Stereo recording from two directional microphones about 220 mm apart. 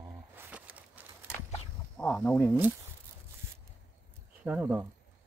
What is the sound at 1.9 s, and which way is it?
Speech, 5° left (ahead or behind).